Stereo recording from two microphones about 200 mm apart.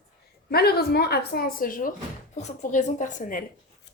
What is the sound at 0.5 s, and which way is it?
A woman's voice, 50° left (ahead or behind).